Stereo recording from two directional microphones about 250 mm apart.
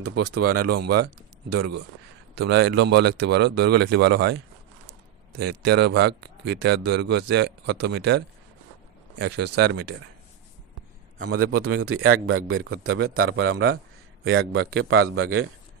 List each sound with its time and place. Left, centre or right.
0.2 s a man's voice: right
0.8 s speech: right
5.4 s speech: right
9.2 s a man's voice: right
11.1 s a man's voice: right